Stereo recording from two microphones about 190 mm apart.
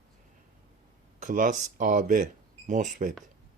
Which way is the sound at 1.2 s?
45° right (ahead or behind).